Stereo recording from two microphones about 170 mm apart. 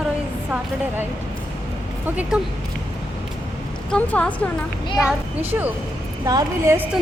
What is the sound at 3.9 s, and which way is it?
Speech, 5° left (ahead or behind).